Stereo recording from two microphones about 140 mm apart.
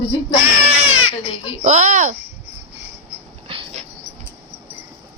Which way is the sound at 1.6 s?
60° right (ahead or behind).